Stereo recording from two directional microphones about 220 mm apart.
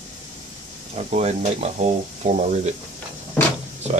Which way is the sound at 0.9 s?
30° right (ahead or behind).